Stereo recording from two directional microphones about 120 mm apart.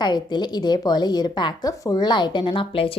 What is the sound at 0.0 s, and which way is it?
A woman's voice, 35° left (ahead or behind).